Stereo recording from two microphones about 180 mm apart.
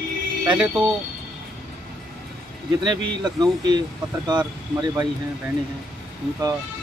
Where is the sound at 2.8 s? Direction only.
25° right (ahead or behind).